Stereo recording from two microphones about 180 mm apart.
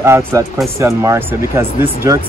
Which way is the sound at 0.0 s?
15° right (ahead or behind).